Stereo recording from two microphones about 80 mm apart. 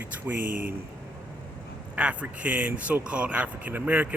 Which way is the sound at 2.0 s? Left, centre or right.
Centre.